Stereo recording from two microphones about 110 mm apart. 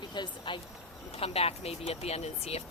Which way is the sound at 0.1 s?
45° left (ahead or behind).